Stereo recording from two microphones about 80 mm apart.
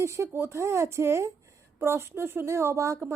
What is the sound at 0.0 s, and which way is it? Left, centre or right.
Speech, right.